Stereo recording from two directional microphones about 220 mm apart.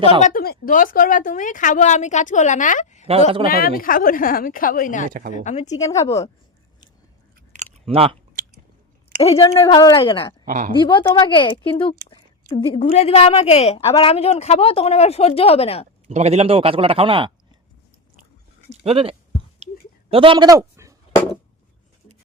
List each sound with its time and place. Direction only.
0.0 s a woman's voice: 35° left (ahead or behind)
3.1 s a man's voice: 25° right (ahead or behind)
3.5 s a woman's voice: 40° left (ahead or behind)
5.0 s speech: 40° right (ahead or behind)
5.3 s a woman's voice: 35° left (ahead or behind)
5.7 s a woman's voice: 15° left (ahead or behind)
7.5 s chewing: 30° right (ahead or behind)
9.3 s a woman's voice: 15° left (ahead or behind)
10.4 s speech: 35° right (ahead or behind)
10.8 s a woman's voice: 20° left (ahead or behind)
16.0 s a man's voice: 30° right (ahead or behind)
18.8 s a man's voice: 25° right (ahead or behind)